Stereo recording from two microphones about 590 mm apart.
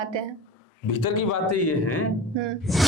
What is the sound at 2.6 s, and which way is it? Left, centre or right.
Speech, centre.